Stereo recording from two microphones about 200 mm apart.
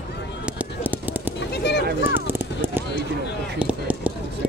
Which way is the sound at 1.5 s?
55° left (ahead or behind).